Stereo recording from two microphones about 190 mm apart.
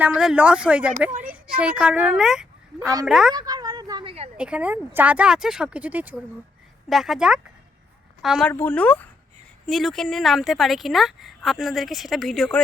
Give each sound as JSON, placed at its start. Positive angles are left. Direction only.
{"t": 0.0, "sound": "a woman's voice", "side_deg": -5}
{"t": 3.3, "sound": "a sound", "side_deg": -20}
{"t": 4.4, "sound": "a woman's voice", "side_deg": -5}